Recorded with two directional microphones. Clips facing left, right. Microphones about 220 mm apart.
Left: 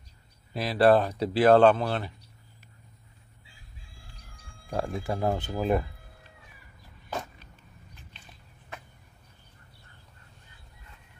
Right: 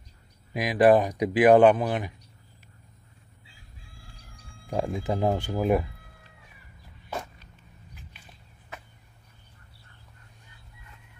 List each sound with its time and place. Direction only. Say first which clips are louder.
0.5 s speech: right 2 dB; 15° right (ahead or behind)
4.6 s speech: right 3 dB; 15° right (ahead or behind)